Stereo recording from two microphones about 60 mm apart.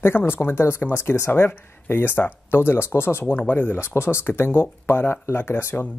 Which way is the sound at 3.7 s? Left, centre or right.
Left.